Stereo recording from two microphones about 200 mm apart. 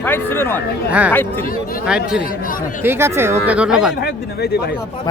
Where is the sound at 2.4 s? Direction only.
45° left (ahead or behind).